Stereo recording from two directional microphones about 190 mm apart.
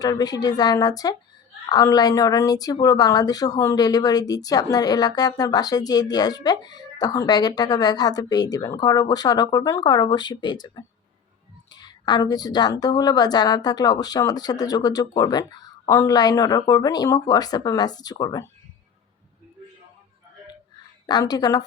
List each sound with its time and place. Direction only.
0.0 s speech: 20° left (ahead or behind)
21.1 s speech: 20° left (ahead or behind)